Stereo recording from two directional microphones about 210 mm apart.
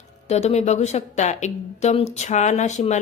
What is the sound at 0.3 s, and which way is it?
A woman's voice, 30° left (ahead or behind).